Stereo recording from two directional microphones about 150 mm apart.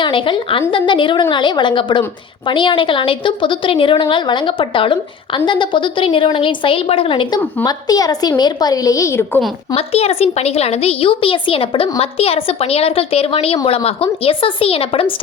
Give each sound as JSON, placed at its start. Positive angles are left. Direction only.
{"t": 0.0, "sound": "a woman's voice", "side_deg": 35}
{"t": 9.7, "sound": "a woman's voice", "side_deg": 40}